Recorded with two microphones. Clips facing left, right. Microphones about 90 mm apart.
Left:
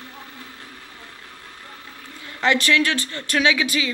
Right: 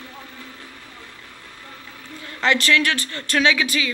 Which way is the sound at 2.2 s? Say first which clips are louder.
Even; 20° left (ahead or behind).